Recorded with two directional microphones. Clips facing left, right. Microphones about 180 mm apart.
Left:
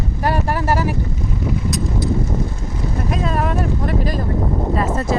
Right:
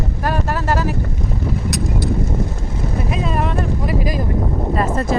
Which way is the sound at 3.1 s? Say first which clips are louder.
Left 1 dB; centre (ahead or behind).